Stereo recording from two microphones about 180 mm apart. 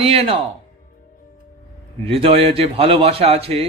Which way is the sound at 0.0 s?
35° right (ahead or behind).